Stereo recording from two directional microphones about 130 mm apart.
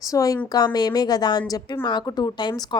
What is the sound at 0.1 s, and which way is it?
A woman's voice, 25° left (ahead or behind).